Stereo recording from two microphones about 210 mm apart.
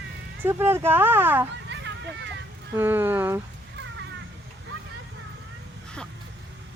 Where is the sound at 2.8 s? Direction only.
10° right (ahead or behind).